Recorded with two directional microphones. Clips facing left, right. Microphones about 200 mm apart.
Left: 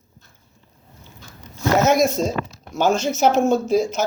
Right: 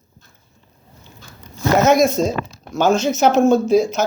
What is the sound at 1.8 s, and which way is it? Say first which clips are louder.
Speech: right 5 dB; 10° left (ahead or behind).